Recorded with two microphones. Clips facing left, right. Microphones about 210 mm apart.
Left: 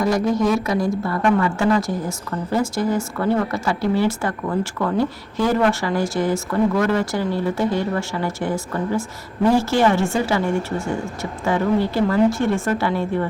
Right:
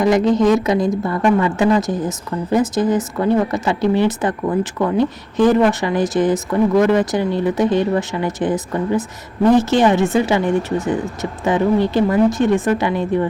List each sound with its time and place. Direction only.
0.0 s a woman's voice: 20° right (ahead or behind)